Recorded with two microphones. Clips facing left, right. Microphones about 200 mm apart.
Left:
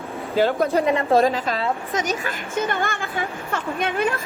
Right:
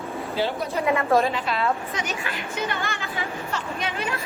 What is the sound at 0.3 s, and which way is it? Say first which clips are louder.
Speech: left 8 dB; 50° left (ahead or behind).